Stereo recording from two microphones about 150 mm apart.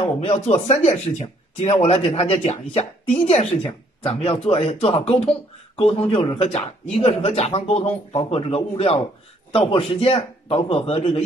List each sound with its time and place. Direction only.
0.0 s speech: 45° left (ahead or behind)